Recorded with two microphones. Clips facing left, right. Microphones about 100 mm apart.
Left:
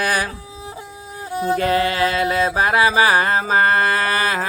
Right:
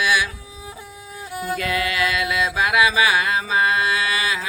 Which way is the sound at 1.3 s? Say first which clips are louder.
Left 6 dB; 30° left (ahead or behind).